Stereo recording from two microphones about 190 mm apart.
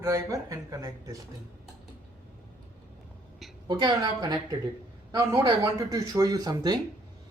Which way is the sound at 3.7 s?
25° right (ahead or behind).